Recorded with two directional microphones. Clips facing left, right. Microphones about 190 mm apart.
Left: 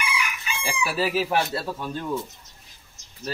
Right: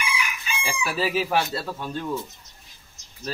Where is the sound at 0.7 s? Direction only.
Centre (ahead or behind).